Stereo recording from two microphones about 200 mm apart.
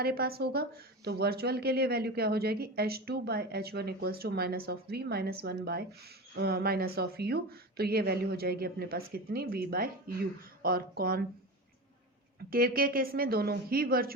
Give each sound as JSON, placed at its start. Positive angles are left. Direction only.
{"t": 0.0, "sound": "a woman's voice", "side_deg": -50}
{"t": 12.5, "sound": "a woman's voice", "side_deg": -45}